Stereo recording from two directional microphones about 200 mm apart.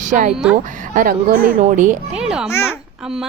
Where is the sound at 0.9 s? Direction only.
45° right (ahead or behind).